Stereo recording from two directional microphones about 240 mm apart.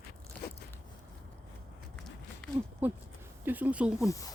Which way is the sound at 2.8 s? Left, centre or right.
Centre.